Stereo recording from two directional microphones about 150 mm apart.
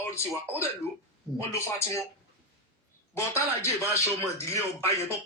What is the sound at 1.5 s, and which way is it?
Speech, 20° left (ahead or behind).